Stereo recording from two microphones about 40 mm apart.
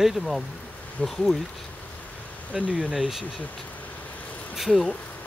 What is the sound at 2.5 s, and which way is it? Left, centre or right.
Speech, right.